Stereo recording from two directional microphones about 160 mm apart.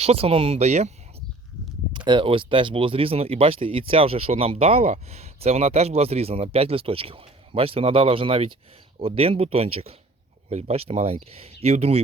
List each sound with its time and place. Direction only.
0.0 s speech: 40° right (ahead or behind)
2.0 s speech: 30° right (ahead or behind)